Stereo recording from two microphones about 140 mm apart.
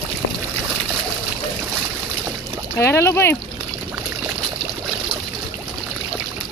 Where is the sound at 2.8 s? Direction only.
20° left (ahead or behind).